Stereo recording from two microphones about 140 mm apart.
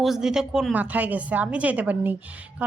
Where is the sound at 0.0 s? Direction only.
5° right (ahead or behind).